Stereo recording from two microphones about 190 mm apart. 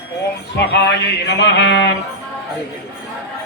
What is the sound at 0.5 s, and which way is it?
Music, 60° left (ahead or behind).